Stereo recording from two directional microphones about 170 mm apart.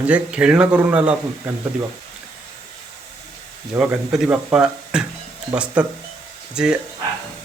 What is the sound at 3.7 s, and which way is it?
Speech, 5° right (ahead or behind).